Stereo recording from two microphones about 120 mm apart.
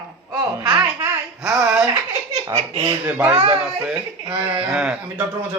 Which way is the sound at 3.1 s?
15° right (ahead or behind).